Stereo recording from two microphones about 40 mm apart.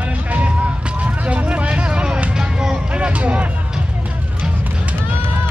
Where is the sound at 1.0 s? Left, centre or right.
Right.